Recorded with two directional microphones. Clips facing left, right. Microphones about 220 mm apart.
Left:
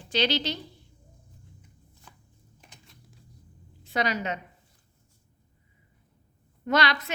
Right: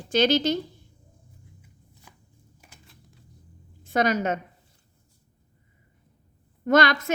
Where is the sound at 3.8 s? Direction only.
50° right (ahead or behind).